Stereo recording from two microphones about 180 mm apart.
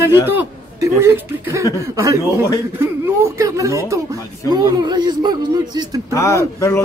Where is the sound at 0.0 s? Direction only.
10° right (ahead or behind).